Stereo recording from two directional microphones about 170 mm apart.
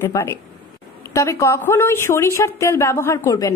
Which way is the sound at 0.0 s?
15° left (ahead or behind).